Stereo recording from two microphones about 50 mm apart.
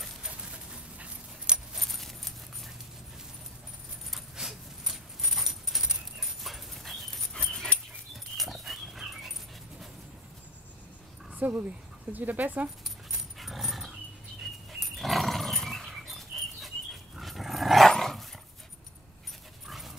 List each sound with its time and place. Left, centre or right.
0.3 s dog: right
2.0 s a sound: centre
4.1 s dog: centre
8.4 s dog: centre
11.3 s dog: right
12.1 s speech: right
13.4 s dog: centre